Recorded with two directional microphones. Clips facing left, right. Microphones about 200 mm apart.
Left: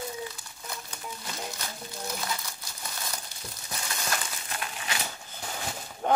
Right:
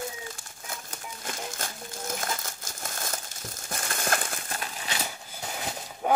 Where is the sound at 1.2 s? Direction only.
50° right (ahead or behind).